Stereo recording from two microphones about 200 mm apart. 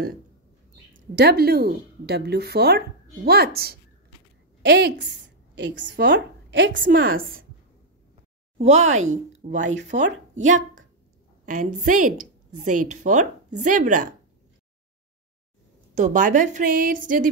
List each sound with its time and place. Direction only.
0.9 s a woman's voice: 55° right (ahead or behind)
6.8 s speech: 50° right (ahead or behind)
8.5 s a woman's voice: 35° right (ahead or behind)
15.9 s a woman's voice: 40° right (ahead or behind)